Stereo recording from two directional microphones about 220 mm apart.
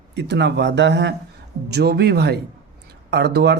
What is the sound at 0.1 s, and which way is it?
Speech, 50° right (ahead or behind).